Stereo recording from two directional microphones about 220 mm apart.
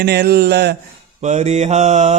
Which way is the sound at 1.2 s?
30° right (ahead or behind).